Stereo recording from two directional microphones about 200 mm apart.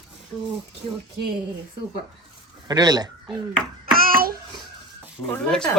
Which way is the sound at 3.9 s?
45° right (ahead or behind).